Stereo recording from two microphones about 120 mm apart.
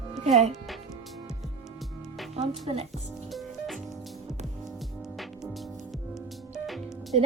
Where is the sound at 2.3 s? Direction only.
55° right (ahead or behind).